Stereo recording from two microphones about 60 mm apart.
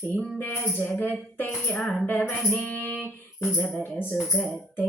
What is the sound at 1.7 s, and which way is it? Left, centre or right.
Speech, centre.